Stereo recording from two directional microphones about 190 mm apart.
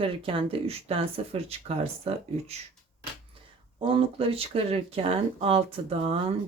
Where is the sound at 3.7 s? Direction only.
30° right (ahead or behind).